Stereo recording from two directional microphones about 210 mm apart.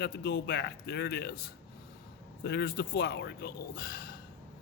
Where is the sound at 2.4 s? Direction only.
55° left (ahead or behind).